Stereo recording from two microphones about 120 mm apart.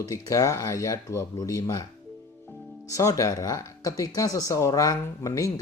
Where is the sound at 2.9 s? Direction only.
25° left (ahead or behind).